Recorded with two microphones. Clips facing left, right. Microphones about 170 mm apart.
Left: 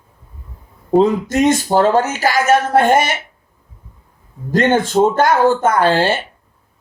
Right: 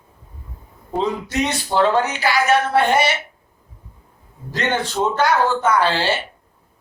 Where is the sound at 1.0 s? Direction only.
45° left (ahead or behind).